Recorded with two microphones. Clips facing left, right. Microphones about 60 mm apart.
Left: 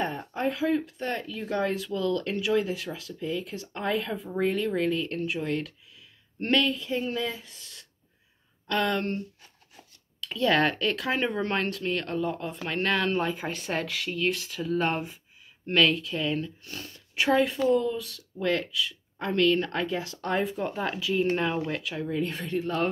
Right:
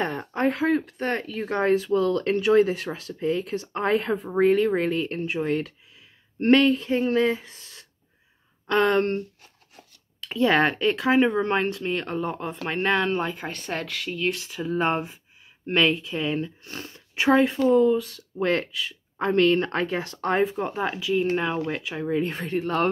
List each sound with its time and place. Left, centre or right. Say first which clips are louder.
0.0 s speech: right 4 dB; right
10.2 s speech: right 3 dB; right
12.6 s speech: right 3 dB; centre
13.1 s speech: right 1 dB; centre
14.6 s speech: right 3 dB; centre; by 20.4 s right
20.4 s speech: right 3 dB; centre
21.6 s speech: right 2 dB; centre
22.0 s speech: right 6 dB; right